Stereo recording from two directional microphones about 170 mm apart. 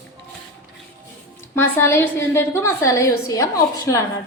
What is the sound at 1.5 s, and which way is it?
A woman's voice, 15° left (ahead or behind).